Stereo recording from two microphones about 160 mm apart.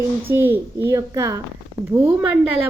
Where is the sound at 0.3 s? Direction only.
15° right (ahead or behind).